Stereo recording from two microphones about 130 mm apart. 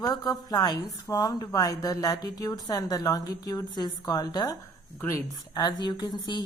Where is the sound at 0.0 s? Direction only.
30° left (ahead or behind).